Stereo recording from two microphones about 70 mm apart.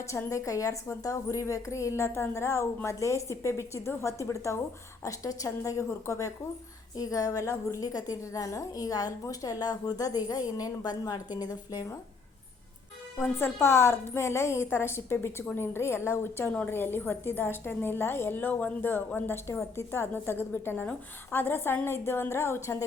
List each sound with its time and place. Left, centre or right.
0.3 s a woman's voice: left
5.0 s a woman's voice: left
13.2 s a woman's voice: left